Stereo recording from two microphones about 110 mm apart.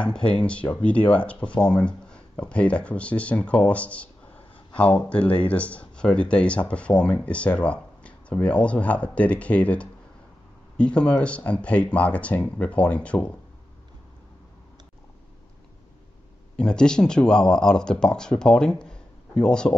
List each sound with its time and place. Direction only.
0.0 s speech: 10° left (ahead or behind)
16.5 s speech: 5° left (ahead or behind)